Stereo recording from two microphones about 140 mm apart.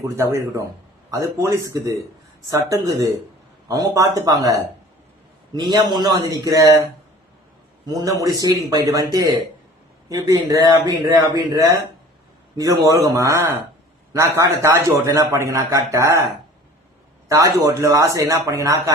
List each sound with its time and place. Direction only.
0.0 s a man's voice: 20° right (ahead or behind)
5.5 s a man's voice: 30° right (ahead or behind)
7.9 s a man's voice: 25° right (ahead or behind)
17.2 s a man's voice: 25° right (ahead or behind)